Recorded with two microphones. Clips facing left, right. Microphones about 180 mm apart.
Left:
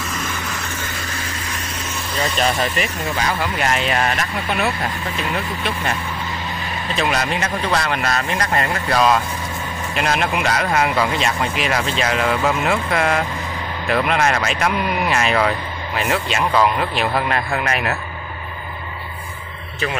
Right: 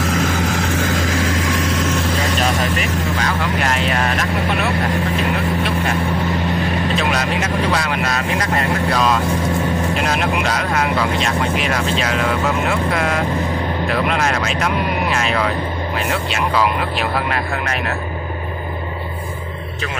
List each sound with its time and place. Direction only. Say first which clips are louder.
0.0 s vehicle: right 8 dB; 85° right
2.8 s speech: right 2 dB; 5° left (ahead or behind)
7.0 s speech: right 1 dB; 5° right (ahead or behind)